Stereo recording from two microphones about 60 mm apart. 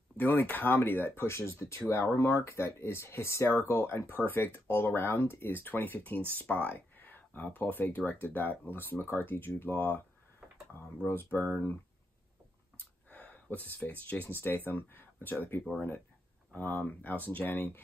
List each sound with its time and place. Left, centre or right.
0.2 s speech: left
11.5 s speech: left
12.7 s a sound: left
14.3 s speech: left
16.5 s speech: left